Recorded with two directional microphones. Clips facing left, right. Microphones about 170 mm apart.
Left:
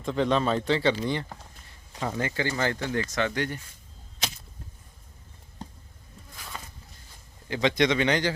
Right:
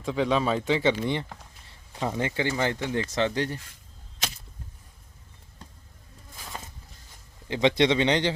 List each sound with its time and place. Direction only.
0.0 s speech: 5° right (ahead or behind)
1.6 s a sound: 25° right (ahead or behind)
2.1 s speech: 20° right (ahead or behind)
7.4 s a man's voice: 25° right (ahead or behind)